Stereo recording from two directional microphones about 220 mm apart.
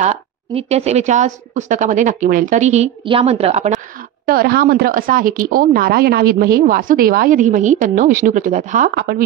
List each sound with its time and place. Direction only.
0.0 s a woman's voice: 30° right (ahead or behind)
4.3 s a woman's voice: 45° right (ahead or behind)